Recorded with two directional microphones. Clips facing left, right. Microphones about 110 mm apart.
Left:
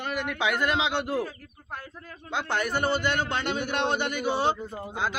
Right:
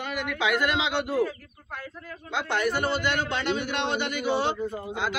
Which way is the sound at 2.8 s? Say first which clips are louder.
Even; 45° left (ahead or behind).